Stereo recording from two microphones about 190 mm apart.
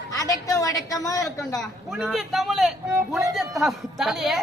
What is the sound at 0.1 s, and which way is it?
A woman's voice, 20° left (ahead or behind).